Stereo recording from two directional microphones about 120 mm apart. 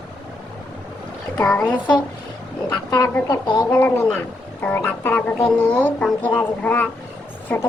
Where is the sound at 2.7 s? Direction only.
35° left (ahead or behind).